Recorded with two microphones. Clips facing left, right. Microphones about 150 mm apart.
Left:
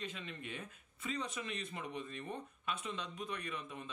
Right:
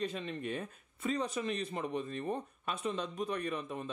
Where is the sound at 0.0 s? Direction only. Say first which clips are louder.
Right 9 dB; 35° right (ahead or behind).